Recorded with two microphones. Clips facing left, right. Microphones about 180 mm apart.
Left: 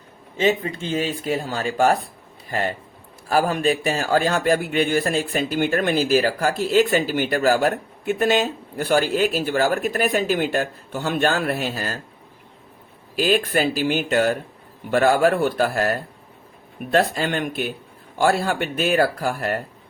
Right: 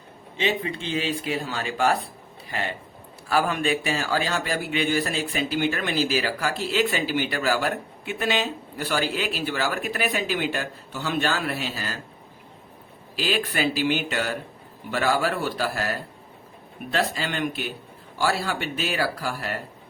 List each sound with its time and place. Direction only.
0.3 s a man's voice: 45° left (ahead or behind)
13.1 s a man's voice: 50° left (ahead or behind)